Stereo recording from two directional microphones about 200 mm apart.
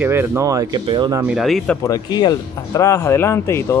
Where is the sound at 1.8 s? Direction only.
20° left (ahead or behind).